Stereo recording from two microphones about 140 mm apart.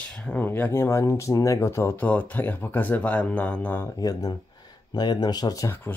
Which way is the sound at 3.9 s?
25° left (ahead or behind).